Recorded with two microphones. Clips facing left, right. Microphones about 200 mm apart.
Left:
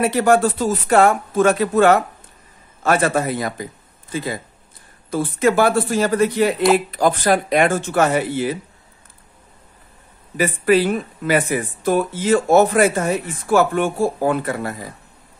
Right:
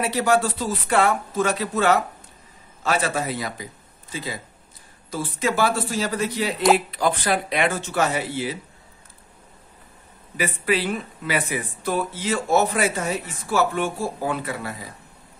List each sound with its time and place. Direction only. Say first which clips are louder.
0.0 s a man's voice: left 5 dB; 55° left (ahead or behind)
10.3 s speech: left 8 dB; 45° left (ahead or behind)